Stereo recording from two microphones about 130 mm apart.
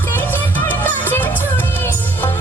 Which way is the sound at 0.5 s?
15° left (ahead or behind).